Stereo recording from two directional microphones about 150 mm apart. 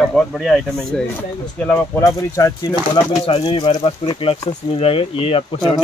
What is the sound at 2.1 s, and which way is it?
Speech, 25° left (ahead or behind).